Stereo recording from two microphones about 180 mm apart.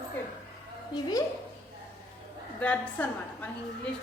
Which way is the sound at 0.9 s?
20° left (ahead or behind).